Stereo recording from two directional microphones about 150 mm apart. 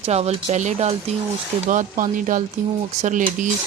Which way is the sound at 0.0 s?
45° right (ahead or behind).